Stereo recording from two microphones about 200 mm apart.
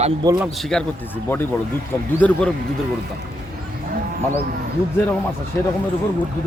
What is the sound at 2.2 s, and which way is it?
Speech, 5° left (ahead or behind).